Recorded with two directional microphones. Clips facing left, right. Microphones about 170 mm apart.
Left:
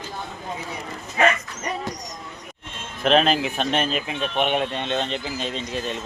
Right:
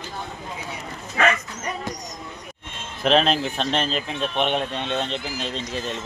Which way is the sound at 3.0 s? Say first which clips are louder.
Left 1 dB; 5° left (ahead or behind).